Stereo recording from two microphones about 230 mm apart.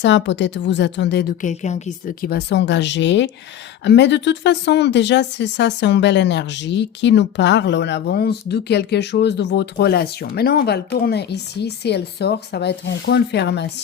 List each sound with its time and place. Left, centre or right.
0.0 s speech: left